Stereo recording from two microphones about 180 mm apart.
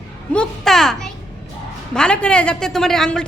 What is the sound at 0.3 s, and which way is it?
A woman's voice, centre (ahead or behind).